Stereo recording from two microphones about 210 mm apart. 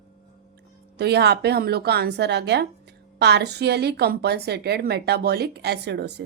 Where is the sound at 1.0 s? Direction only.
50° right (ahead or behind).